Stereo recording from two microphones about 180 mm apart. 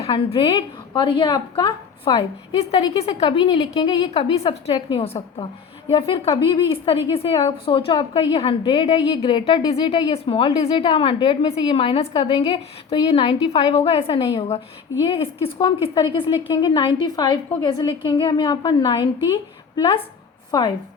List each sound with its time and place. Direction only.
0.0 s a woman's voice: 30° left (ahead or behind)